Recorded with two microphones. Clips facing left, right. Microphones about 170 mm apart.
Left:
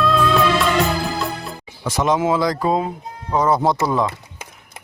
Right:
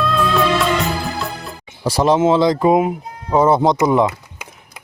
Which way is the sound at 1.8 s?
35° right (ahead or behind).